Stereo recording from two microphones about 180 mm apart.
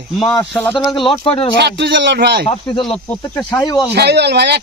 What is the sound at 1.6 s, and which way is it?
Speech, 70° right (ahead or behind).